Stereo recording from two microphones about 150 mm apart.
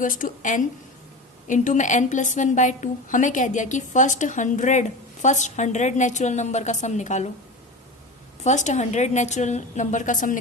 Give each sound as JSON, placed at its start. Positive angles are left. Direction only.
{"t": 0.0, "sound": "a woman's voice", "side_deg": 65}
{"t": 8.4, "sound": "a woman's voice", "side_deg": 50}